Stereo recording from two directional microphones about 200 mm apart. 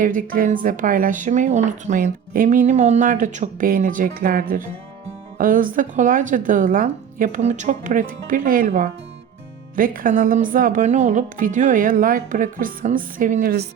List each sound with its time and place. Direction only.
0.0 s speech: 40° right (ahead or behind)